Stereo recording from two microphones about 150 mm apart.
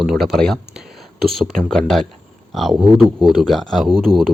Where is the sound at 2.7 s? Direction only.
30° right (ahead or behind).